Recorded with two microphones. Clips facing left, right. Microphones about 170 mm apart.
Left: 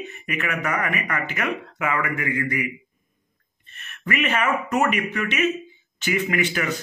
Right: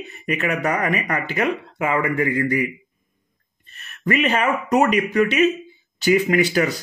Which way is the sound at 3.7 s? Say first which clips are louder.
Right 6 dB; 35° right (ahead or behind).